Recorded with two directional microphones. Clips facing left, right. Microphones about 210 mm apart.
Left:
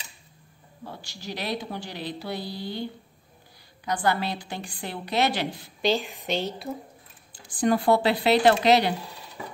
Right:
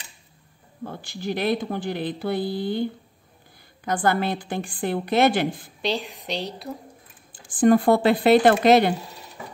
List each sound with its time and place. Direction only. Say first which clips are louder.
0.8 s a woman's voice: right 8 dB; 55° right (ahead or behind)
5.8 s a woman's voice: left 3 dB; centre (ahead or behind)
7.3 s a woman's voice: right 6 dB; 50° right (ahead or behind)